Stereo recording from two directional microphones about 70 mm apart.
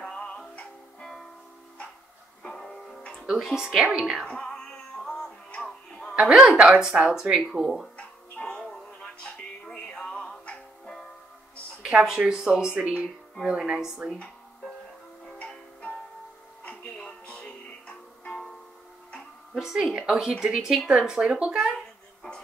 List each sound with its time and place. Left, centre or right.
0.0 s music: centre
2.4 s music: centre
3.3 s speech: centre
4.3 s music: centre
6.1 s speech: centre
8.0 s music: centre
11.8 s speech: centre
14.1 s music: centre
19.6 s speech: centre